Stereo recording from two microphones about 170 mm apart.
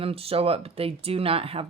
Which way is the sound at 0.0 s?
35° right (ahead or behind).